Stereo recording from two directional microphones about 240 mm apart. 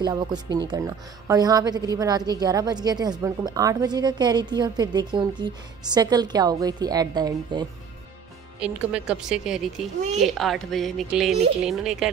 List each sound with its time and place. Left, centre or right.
0.0 s a woman's voice: centre
8.5 s speech: centre
9.9 s speech: right
10.2 s speech: centre